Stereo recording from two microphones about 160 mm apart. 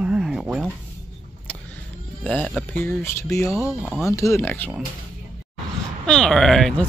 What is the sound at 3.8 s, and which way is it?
Speech, 5° right (ahead or behind).